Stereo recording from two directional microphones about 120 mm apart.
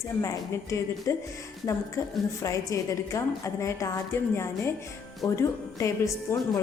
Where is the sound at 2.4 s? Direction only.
25° left (ahead or behind).